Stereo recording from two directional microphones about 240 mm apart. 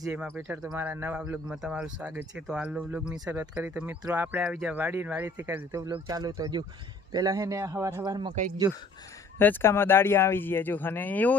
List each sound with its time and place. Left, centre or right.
0.0 s speech: centre
9.4 s speech: centre